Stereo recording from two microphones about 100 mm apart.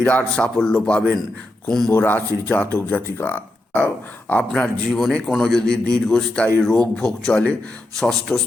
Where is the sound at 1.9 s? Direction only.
20° left (ahead or behind).